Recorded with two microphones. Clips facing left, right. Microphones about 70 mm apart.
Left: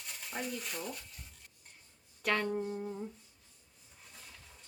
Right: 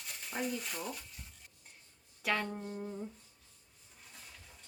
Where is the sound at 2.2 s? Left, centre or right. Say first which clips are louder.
Left 3 dB; centre.